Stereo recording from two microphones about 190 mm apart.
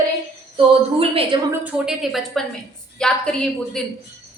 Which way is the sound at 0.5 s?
30° right (ahead or behind).